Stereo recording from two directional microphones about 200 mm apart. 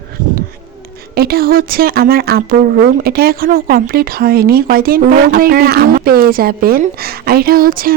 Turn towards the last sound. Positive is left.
turn(degrees=-45)  # may be behind; listen again after turning